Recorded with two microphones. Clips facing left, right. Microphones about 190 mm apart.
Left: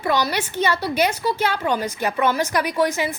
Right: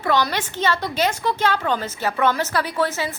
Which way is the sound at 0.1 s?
10° left (ahead or behind).